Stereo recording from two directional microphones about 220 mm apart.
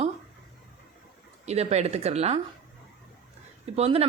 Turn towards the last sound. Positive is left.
turn(degrees=-25)  # may be behind; listen again after turning